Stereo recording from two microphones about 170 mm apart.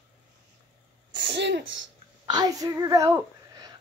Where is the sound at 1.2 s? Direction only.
85° right.